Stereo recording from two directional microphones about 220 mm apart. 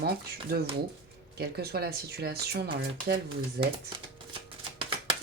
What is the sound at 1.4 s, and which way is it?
Speech, 45° right (ahead or behind).